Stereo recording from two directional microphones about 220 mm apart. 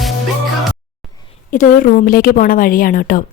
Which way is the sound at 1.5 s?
35° left (ahead or behind).